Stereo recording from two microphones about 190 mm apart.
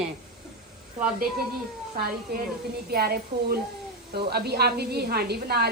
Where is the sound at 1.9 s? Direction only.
55° right (ahead or behind).